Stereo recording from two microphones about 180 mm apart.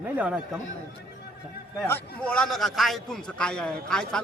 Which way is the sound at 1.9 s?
10° left (ahead or behind).